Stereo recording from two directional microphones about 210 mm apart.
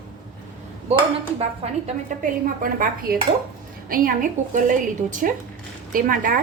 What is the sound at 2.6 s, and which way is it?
Speech, 45° right (ahead or behind).